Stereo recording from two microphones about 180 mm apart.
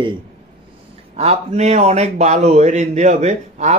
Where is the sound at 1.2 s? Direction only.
35° right (ahead or behind).